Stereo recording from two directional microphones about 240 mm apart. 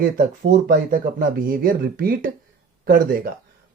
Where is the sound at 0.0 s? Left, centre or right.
Right.